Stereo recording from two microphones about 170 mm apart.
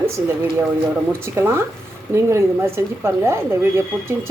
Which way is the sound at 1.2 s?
15° right (ahead or behind).